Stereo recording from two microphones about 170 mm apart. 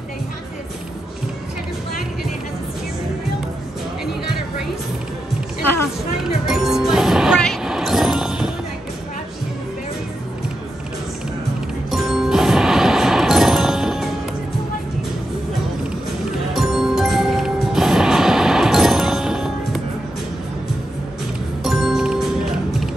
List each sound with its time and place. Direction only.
6.4 s music: centre (ahead or behind)
11.9 s music: centre (ahead or behind)
16.5 s music: centre (ahead or behind)
21.6 s music: centre (ahead or behind)